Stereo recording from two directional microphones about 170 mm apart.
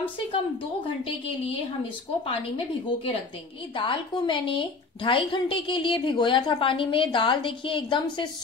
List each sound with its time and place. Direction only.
2.2 s a woman's voice: 35° left (ahead or behind)